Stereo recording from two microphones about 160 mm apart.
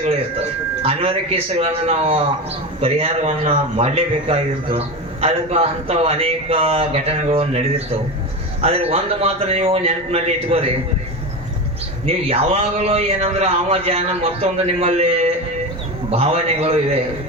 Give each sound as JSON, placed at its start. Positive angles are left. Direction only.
{"t": 0.8, "sound": "a man's voice", "side_deg": -35}
{"t": 8.6, "sound": "a man's voice", "side_deg": -40}
{"t": 12.0, "sound": "a man's voice", "side_deg": -35}